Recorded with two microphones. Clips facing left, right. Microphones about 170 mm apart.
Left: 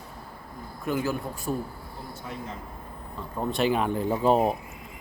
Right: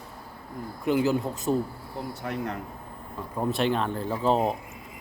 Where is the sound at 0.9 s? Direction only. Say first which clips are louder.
Right 4 dB; 20° right (ahead or behind).